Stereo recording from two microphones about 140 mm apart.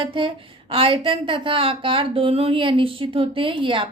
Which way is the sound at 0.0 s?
40° right (ahead or behind).